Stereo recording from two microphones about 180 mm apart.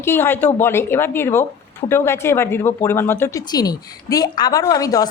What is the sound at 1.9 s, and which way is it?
Speech, 15° left (ahead or behind).